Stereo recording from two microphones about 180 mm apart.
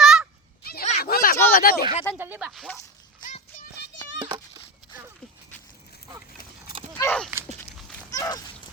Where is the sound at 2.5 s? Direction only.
Centre (ahead or behind).